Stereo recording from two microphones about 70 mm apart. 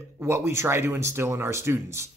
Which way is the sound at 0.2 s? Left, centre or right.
Right.